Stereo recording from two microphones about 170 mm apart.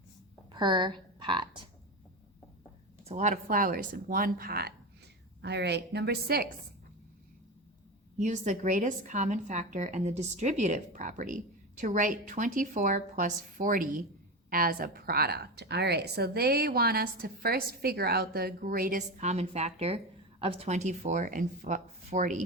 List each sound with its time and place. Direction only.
0.5 s a woman's voice: 25° right (ahead or behind)
3.0 s a woman's voice: 40° right (ahead or behind); by 4.7 s 65° right (ahead or behind)
5.4 s a woman's voice: 80° right
8.2 s a woman's voice: 45° right (ahead or behind)